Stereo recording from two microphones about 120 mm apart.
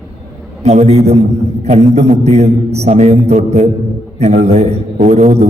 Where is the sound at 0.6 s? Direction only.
65° right (ahead or behind).